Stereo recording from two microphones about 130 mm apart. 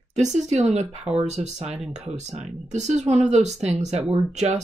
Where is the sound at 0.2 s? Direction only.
65° right (ahead or behind).